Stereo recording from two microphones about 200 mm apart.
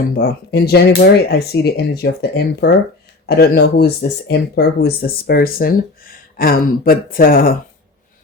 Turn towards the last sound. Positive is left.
turn(degrees=45)  # may be behind; listen again after turning